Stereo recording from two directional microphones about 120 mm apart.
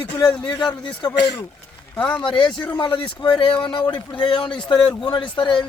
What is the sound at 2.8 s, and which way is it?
Speech, 40° left (ahead or behind).